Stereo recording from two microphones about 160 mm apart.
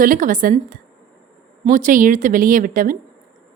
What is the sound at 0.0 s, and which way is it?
A woman's voice, 55° right (ahead or behind).